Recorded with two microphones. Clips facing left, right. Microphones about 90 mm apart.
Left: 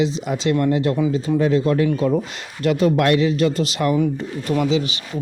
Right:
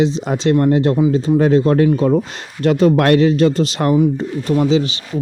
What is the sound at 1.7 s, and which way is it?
Speech, 40° right (ahead or behind).